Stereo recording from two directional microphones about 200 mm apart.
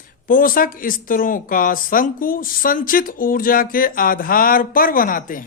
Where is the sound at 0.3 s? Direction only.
45° left (ahead or behind).